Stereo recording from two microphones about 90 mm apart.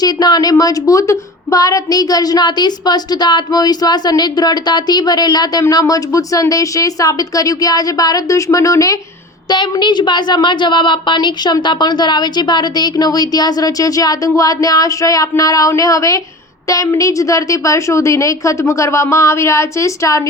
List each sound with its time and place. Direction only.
0.0 s a woman's voice: 50° left (ahead or behind)
5.6 s speech: 40° left (ahead or behind)
9.5 s a woman's voice: 55° left (ahead or behind); by 20.2 s 35° left (ahead or behind)